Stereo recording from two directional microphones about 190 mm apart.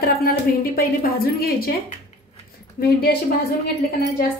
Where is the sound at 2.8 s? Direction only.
55° left (ahead or behind).